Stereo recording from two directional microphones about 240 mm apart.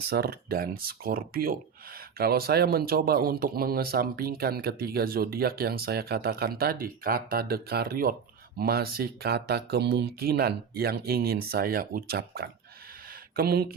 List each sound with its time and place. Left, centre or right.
0.1 s speech: right